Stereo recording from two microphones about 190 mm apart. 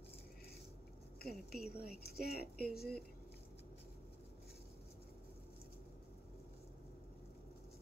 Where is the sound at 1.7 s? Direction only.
55° left (ahead or behind).